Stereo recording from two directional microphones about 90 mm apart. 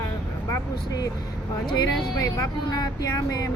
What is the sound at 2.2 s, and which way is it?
Speech, 50° left (ahead or behind).